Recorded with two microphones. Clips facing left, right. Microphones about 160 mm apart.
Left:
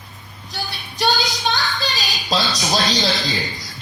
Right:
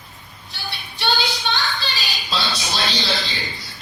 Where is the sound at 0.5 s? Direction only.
40° left (ahead or behind).